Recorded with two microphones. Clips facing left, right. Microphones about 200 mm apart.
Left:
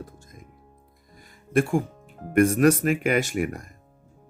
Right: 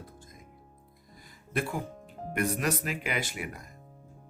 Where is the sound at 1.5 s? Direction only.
50° left (ahead or behind).